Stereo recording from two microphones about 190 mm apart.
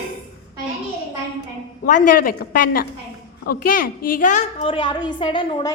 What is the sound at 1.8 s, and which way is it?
A woman's voice, 45° left (ahead or behind).